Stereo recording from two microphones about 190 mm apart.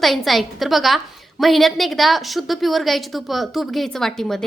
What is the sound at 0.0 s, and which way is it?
A woman's voice, centre (ahead or behind).